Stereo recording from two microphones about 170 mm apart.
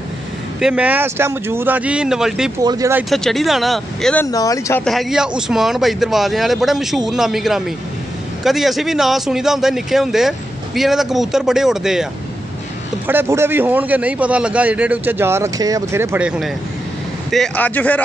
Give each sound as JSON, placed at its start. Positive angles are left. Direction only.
{"t": 0.6, "sound": "a man's voice", "side_deg": -5}
{"t": 2.6, "sound": "speech", "side_deg": -25}
{"t": 3.1, "sound": "speech", "side_deg": 0}
{"t": 4.3, "sound": "speech", "side_deg": 20}
{"t": 4.8, "sound": "a man's voice", "side_deg": 0}